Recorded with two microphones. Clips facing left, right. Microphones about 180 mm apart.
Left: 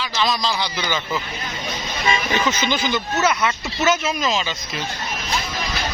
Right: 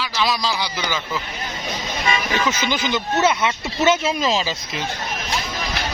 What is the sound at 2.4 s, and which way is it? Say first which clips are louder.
Speech: left 1 dB; 15° right (ahead or behind).